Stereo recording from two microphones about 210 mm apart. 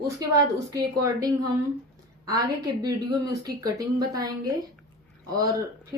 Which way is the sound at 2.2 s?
15° right (ahead or behind).